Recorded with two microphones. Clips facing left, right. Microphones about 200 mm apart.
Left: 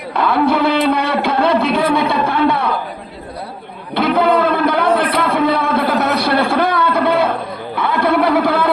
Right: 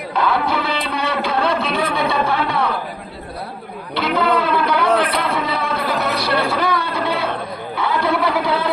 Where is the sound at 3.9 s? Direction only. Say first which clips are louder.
Left 4 dB; 50° left (ahead or behind).